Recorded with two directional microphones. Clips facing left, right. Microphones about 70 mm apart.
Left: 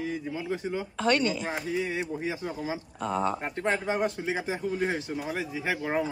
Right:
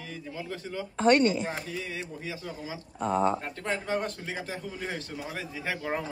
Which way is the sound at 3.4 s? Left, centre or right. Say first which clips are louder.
Left 4 dB; left.